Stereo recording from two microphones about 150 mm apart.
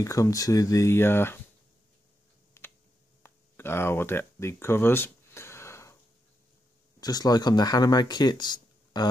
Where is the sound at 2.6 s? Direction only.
15° left (ahead or behind).